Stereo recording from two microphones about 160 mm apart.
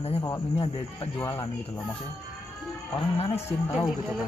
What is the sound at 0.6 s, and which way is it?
Music, 35° left (ahead or behind).